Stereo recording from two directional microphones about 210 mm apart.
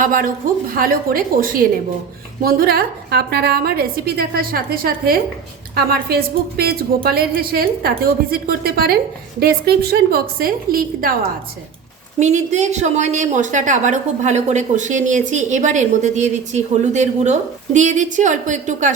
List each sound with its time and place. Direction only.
0.0 s a woman's voice: 40° right (ahead or behind)
12.2 s a woman's voice: 35° right (ahead or behind)